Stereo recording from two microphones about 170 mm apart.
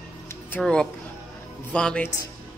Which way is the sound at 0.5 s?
5° left (ahead or behind).